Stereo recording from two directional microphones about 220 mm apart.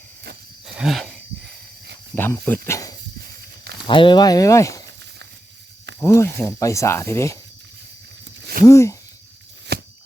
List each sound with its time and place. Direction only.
0.7 s a sound: centre (ahead or behind)
2.1 s speech: 10° left (ahead or behind)
6.0 s speech: 10° left (ahead or behind)
8.4 s a sound: 45° right (ahead or behind)
8.6 s speech: 15° left (ahead or behind)
9.7 s shuffling cards: 45° right (ahead or behind)